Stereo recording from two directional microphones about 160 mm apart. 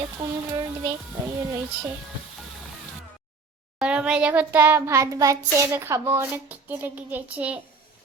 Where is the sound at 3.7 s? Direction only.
5° right (ahead or behind).